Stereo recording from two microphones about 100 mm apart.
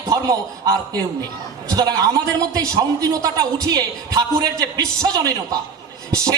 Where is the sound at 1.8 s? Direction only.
40° right (ahead or behind).